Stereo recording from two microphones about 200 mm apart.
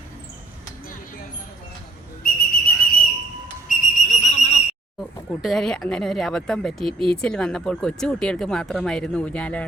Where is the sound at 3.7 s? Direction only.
35° left (ahead or behind).